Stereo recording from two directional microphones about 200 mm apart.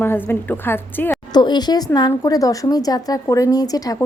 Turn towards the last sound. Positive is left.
turn(degrees=20)  # may be behind; listen again after turning